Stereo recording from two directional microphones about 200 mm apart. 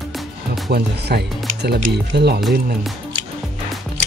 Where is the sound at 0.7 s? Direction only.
55° right (ahead or behind).